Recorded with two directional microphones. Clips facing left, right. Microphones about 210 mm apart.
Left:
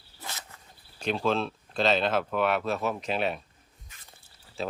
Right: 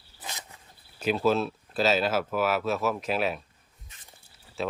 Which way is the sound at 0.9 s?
5° right (ahead or behind).